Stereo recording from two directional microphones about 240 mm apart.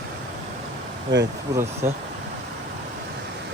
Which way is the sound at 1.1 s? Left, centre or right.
Right.